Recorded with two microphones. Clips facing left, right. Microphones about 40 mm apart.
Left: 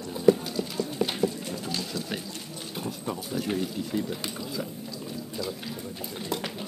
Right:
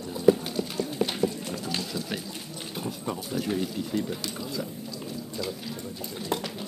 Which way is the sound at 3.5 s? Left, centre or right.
Centre.